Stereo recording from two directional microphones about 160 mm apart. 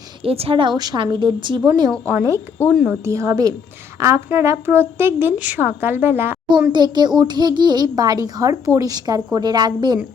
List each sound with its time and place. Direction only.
0.2 s a child's voice: 35° right (ahead or behind); by 2.4 s 20° right (ahead or behind)
2.7 s speech: 5° right (ahead or behind)
3.0 s a child's voice: 20° right (ahead or behind)
6.7 s a child's voice: 25° right (ahead or behind)